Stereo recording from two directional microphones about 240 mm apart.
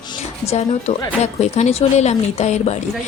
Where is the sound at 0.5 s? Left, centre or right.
Left.